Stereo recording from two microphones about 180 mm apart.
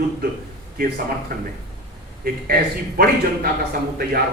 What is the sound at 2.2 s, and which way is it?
A man's voice, 55° right (ahead or behind).